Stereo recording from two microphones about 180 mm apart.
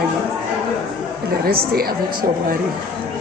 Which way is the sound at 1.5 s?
55° right (ahead or behind).